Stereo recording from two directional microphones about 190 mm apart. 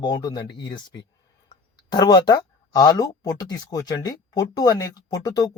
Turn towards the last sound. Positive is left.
turn(degrees=20)  # may be behind; listen again after turning